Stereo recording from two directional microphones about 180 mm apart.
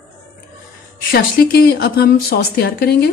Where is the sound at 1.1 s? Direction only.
60° left (ahead or behind).